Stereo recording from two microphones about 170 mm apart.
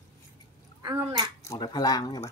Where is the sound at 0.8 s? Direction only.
25° right (ahead or behind).